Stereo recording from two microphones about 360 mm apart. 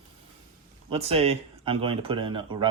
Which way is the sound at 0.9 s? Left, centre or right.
Centre.